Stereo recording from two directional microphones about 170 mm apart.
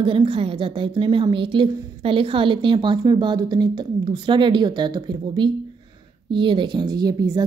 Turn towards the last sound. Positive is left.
turn(degrees=-20)  # may be behind; listen again after turning